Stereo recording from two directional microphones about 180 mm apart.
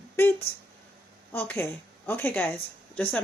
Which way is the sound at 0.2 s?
15° left (ahead or behind).